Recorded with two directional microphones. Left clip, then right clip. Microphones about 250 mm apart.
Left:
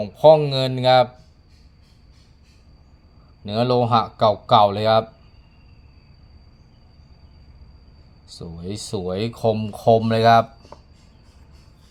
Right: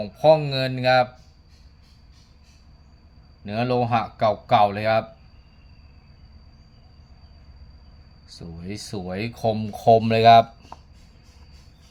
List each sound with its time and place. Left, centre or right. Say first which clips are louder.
0.0 s speech: left 4 dB; centre
3.4 s speech: left 4 dB; centre
8.3 s speech: left 4 dB; centre